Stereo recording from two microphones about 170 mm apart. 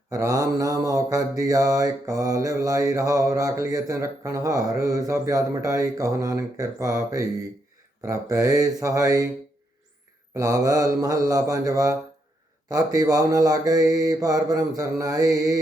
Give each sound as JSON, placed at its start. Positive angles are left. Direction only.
{"t": 0.1, "sound": "mantra", "side_deg": -20}
{"t": 10.3, "sound": "mantra", "side_deg": -20}